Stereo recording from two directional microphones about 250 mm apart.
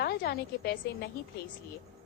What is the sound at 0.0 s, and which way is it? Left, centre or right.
A woman's voice, left.